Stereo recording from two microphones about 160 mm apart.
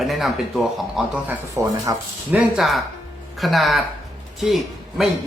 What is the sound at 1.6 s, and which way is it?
Speech, 20° right (ahead or behind).